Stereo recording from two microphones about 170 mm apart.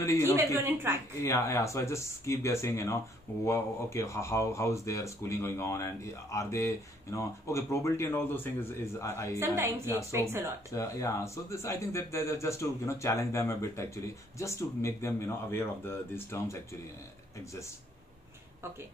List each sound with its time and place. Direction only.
0.0 s speech: 20° left (ahead or behind)
0.4 s a woman's voice: 15° right (ahead or behind)
1.2 s speech: 15° left (ahead or behind)
9.4 s a woman's voice: 15° right (ahead or behind)
10.7 s speech: 20° left (ahead or behind)